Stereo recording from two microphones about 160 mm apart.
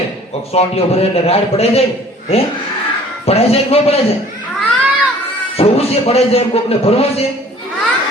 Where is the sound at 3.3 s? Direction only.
40° left (ahead or behind).